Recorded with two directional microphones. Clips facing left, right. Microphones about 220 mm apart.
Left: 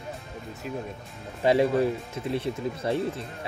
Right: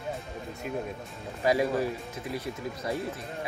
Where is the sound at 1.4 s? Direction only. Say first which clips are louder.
Left 4 dB; 25° left (ahead or behind).